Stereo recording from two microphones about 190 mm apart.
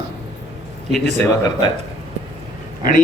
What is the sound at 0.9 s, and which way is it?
Speech, 5° left (ahead or behind).